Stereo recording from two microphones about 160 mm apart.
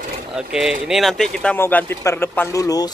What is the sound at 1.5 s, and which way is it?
Speech, 15° left (ahead or behind).